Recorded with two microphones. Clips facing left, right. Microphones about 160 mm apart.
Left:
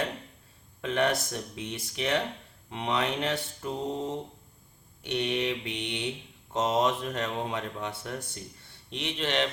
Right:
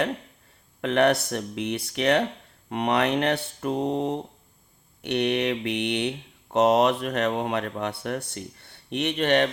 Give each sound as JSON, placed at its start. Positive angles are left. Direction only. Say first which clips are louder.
{"t": 0.8, "sound": "speech", "louder": "right 6 dB", "side_deg": -65}